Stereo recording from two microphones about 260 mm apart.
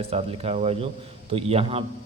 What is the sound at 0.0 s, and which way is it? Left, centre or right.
Speech, right.